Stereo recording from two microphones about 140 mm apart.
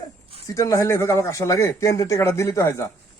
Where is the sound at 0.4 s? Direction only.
25° left (ahead or behind).